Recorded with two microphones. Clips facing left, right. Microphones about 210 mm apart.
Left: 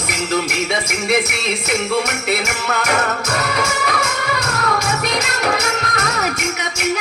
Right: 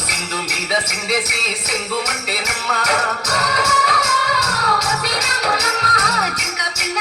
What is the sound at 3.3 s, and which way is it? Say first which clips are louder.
Music: left 1 dB; 55° left (ahead or behind).